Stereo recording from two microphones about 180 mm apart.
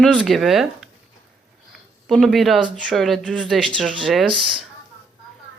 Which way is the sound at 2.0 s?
Centre (ahead or behind).